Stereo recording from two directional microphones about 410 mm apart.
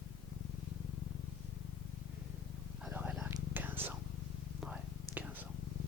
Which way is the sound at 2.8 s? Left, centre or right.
Centre.